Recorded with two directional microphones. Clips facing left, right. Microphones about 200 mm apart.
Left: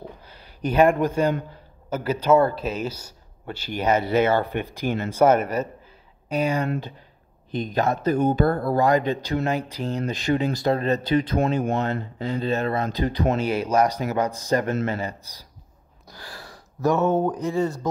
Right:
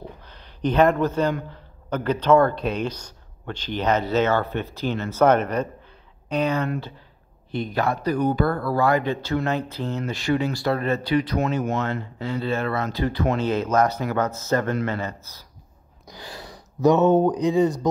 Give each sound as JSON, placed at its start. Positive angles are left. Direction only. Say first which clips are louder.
{"t": 0.2, "sound": "a sound", "louder": "right 4 dB", "side_deg": 10}
{"t": 1.5, "sound": "speech", "louder": "right 1 dB", "side_deg": 5}
{"t": 16.1, "sound": "speech", "louder": "right 3 dB", "side_deg": -20}